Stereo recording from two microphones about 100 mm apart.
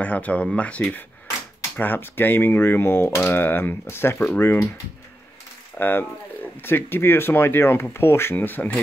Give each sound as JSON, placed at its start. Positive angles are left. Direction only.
{"t": 0.0, "sound": "speech", "side_deg": 15}
{"t": 5.8, "sound": "speech", "side_deg": 20}